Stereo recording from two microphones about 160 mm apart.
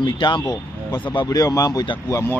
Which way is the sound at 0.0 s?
30° left (ahead or behind).